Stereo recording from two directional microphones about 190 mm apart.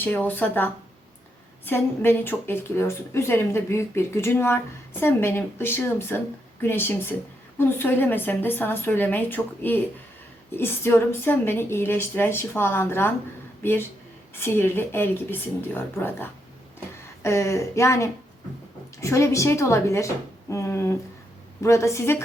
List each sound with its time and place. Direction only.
0.0 s a woman's voice: 10° left (ahead or behind)